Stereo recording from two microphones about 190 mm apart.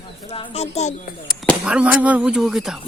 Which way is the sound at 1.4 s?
Centre (ahead or behind).